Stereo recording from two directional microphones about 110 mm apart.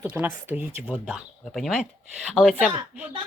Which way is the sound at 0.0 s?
15° right (ahead or behind).